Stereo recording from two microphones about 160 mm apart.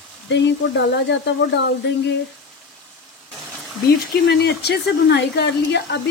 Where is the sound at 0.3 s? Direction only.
90° left.